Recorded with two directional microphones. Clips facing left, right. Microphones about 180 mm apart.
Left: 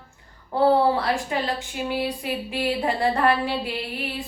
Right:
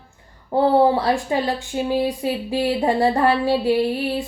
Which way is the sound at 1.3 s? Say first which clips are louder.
Right 5 dB; 25° right (ahead or behind).